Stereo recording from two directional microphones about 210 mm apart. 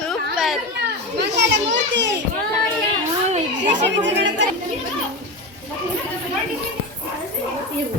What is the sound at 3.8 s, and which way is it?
Speech, 55° right (ahead or behind).